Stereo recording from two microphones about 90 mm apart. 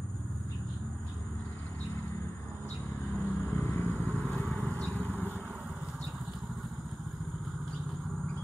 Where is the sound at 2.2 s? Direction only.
30° left (ahead or behind).